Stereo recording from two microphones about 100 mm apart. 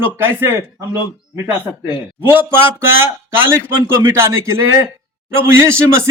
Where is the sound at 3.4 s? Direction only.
25° right (ahead or behind).